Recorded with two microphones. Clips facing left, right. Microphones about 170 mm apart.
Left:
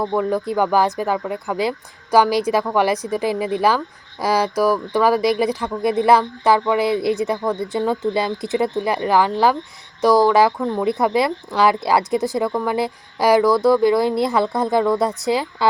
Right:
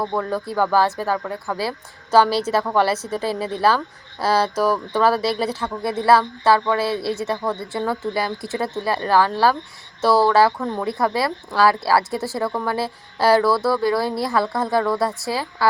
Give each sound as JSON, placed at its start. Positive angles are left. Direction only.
{"t": 0.0, "sound": "speech", "side_deg": 15}